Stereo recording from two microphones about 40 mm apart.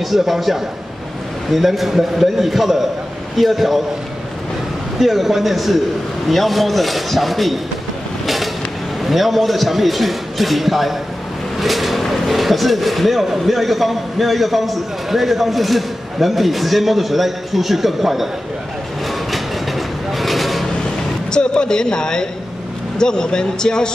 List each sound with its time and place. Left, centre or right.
0.1 s a man's voice: centre
4.9 s a man's voice: centre
9.0 s a man's voice: centre
20.1 s a sound: centre
21.3 s a man's voice: left